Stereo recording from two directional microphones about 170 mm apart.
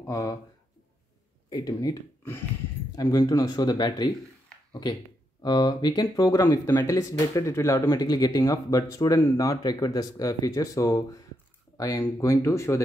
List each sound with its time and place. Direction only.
0.0 s speech: 20° left (ahead or behind)
1.5 s speech: 20° left (ahead or behind)
5.4 s speech: 25° left (ahead or behind)